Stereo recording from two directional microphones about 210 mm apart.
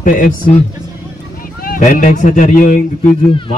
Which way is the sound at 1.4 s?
40° left (ahead or behind).